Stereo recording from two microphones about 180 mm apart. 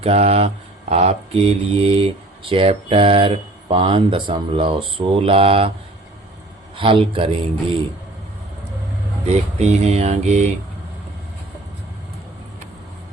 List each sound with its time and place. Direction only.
0.0 s speech: 35° right (ahead or behind)
6.7 s speech: 30° right (ahead or behind)
9.3 s speech: 35° right (ahead or behind)